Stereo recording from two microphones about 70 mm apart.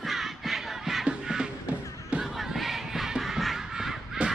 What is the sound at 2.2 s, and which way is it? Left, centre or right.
Battle cry, centre.